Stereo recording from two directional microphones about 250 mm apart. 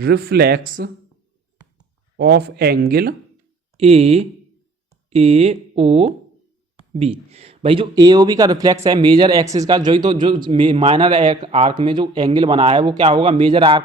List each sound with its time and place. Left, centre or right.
0.0 s speech: right
2.1 s speech: right
3.8 s speech: right